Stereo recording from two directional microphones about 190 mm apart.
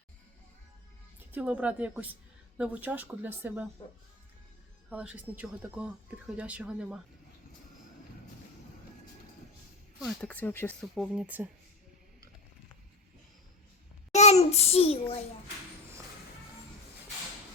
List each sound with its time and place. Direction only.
1.3 s speech: 10° right (ahead or behind)
4.9 s speech: 5° right (ahead or behind)
10.0 s speech: 5° left (ahead or behind)
10.9 s speech: 5° right (ahead or behind)
14.1 s a child's voice: 35° left (ahead or behind)